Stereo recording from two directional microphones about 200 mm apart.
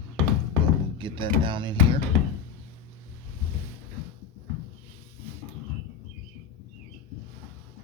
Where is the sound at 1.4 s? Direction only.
25° right (ahead or behind).